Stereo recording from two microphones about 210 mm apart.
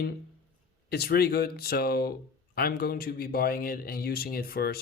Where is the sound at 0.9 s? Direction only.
50° left (ahead or behind).